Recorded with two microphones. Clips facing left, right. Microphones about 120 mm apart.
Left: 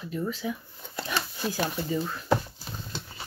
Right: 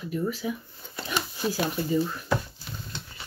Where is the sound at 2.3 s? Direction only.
35° left (ahead or behind).